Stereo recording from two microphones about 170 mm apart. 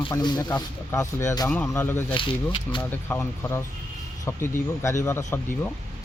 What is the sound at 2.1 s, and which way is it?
Speech, 30° left (ahead or behind).